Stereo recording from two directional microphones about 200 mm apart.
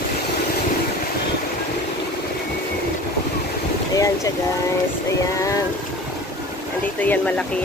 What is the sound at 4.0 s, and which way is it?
Speech, 15° left (ahead or behind).